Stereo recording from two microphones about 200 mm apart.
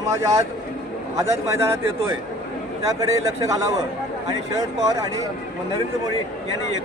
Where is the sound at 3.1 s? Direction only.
15° right (ahead or behind).